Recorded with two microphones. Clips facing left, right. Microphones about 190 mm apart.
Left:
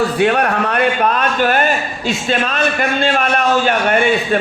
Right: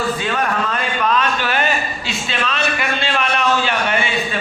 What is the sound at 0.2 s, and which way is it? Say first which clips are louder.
A man's voice: left 6 dB; 65° left (ahead or behind).